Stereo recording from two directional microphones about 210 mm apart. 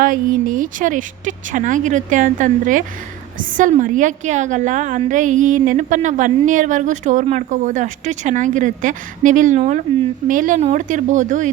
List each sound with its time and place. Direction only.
0.0 s a woman's voice: 40° right (ahead or behind)